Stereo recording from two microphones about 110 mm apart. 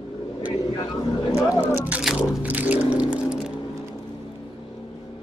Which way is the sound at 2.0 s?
5° right (ahead or behind).